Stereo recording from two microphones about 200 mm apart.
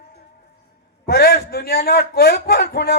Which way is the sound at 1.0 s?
50° left (ahead or behind).